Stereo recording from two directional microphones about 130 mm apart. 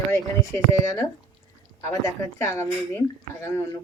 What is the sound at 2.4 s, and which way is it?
Speech, 20° left (ahead or behind).